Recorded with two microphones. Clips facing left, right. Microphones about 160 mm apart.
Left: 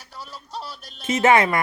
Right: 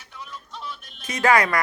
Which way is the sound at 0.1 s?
35° left (ahead or behind).